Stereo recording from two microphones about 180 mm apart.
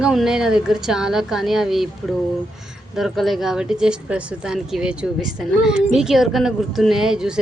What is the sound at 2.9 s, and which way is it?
Speech, centre (ahead or behind).